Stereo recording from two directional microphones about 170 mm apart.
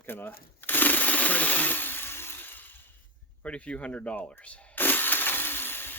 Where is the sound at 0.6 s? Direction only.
10° left (ahead or behind).